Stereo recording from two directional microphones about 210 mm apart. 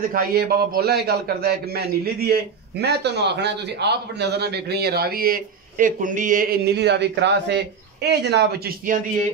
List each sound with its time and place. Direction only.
0.1 s a man's voice: 45° right (ahead or behind)